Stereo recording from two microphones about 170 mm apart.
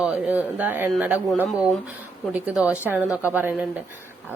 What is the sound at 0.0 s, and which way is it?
A woman's voice, 10° right (ahead or behind).